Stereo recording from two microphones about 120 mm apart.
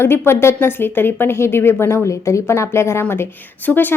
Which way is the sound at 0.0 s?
20° left (ahead or behind).